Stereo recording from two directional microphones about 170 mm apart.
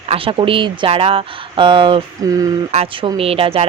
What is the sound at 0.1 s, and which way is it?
Speech, 30° right (ahead or behind).